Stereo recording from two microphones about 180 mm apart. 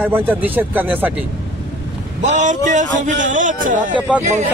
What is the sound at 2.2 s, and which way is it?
Speech, 40° right (ahead or behind).